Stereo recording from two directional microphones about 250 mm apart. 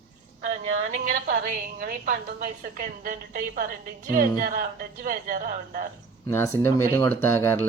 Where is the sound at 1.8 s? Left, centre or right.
Right.